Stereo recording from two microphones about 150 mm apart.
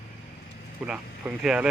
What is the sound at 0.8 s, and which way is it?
Speech, 5° right (ahead or behind).